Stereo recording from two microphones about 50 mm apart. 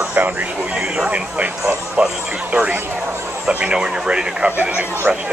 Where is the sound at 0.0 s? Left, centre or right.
Right.